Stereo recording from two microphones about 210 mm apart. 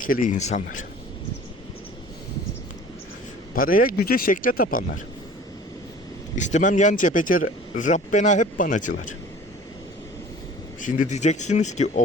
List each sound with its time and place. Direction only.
0.0 s speech: 40° left (ahead or behind)
3.5 s speech: 40° left (ahead or behind)
6.3 s speech: 35° left (ahead or behind)
10.8 s speech: 40° left (ahead or behind)